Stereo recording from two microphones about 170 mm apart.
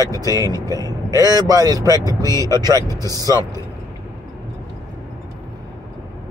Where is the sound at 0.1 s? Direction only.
20° left (ahead or behind).